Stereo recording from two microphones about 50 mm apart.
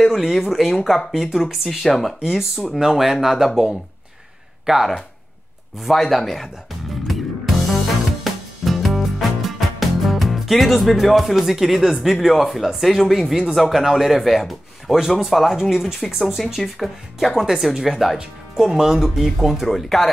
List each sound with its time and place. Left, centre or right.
0.0 s speech: centre
4.7 s speech: centre
5.8 s speech: centre
7.1 s music: centre
13.3 s speech: centre